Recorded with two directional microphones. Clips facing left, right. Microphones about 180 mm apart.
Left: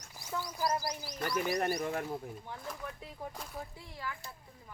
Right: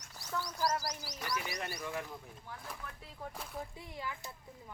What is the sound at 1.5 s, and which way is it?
Speech, 50° left (ahead or behind).